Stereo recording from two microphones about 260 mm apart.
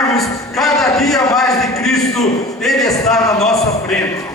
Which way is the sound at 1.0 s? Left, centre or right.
Centre.